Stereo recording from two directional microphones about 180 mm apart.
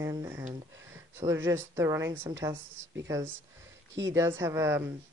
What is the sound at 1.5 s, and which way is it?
Speech, 15° right (ahead or behind).